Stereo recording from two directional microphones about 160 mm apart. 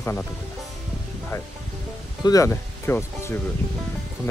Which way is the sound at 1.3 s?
20° left (ahead or behind).